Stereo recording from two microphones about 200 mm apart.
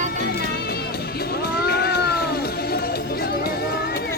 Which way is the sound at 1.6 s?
50° left (ahead or behind).